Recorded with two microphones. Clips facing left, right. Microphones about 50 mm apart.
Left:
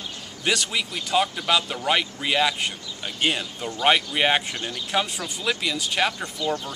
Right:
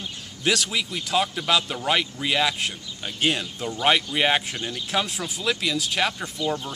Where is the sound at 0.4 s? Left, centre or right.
Centre.